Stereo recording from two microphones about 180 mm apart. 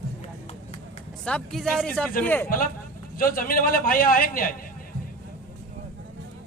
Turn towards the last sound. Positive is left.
turn(degrees=50)  # may be behind; listen again after turning